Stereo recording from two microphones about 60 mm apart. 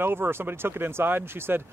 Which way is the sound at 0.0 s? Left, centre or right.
Right.